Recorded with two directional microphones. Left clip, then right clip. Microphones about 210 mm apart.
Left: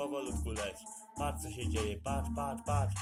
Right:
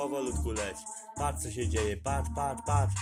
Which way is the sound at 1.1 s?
20° right (ahead or behind).